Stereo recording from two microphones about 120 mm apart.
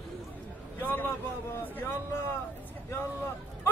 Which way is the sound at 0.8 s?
15° left (ahead or behind).